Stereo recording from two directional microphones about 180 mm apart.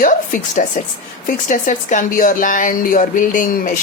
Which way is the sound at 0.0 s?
45° left (ahead or behind).